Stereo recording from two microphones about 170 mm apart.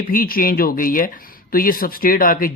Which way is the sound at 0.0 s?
55° left (ahead or behind).